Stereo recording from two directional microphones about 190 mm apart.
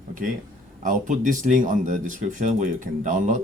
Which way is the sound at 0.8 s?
40° right (ahead or behind).